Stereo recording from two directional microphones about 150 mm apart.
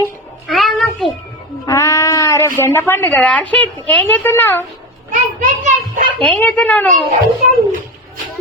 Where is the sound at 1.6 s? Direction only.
20° left (ahead or behind).